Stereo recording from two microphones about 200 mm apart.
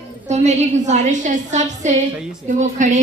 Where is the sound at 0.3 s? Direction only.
35° right (ahead or behind).